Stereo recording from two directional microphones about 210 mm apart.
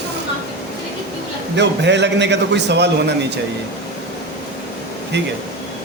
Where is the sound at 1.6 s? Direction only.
55° right (ahead or behind).